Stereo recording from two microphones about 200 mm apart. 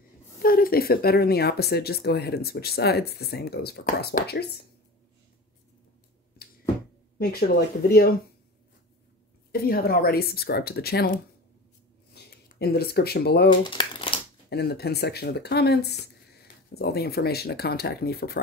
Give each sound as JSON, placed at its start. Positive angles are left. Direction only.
{"t": 0.4, "sound": "speech", "side_deg": 45}
{"t": 6.4, "sound": "a sound", "side_deg": 50}
{"t": 7.2, "sound": "speech", "side_deg": 50}
{"t": 9.5, "sound": "speech", "side_deg": 50}
{"t": 13.5, "sound": "crumpling", "side_deg": 25}
{"t": 14.5, "sound": "speech", "side_deg": 55}